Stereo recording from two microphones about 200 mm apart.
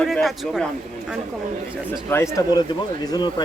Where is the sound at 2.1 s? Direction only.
15° left (ahead or behind).